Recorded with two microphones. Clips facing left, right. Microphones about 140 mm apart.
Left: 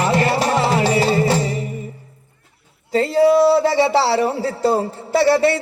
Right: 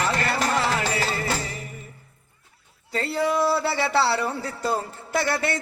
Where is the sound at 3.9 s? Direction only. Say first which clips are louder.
Left 6 dB; 35° left (ahead or behind).